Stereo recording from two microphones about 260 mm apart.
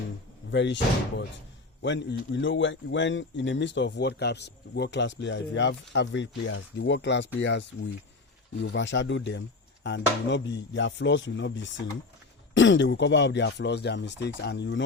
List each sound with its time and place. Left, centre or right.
0.5 s speech: left
1.8 s speech: left